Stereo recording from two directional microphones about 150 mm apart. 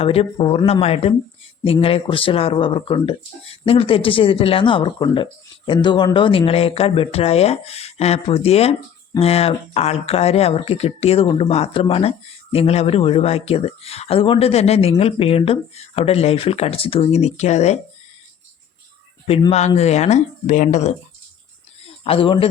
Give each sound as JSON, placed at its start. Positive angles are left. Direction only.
{"t": 0.0, "sound": "speech", "side_deg": 40}
{"t": 19.5, "sound": "speech", "side_deg": 45}
{"t": 22.0, "sound": "speech", "side_deg": 35}